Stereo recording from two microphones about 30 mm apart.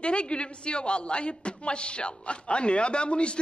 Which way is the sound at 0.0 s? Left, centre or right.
Left.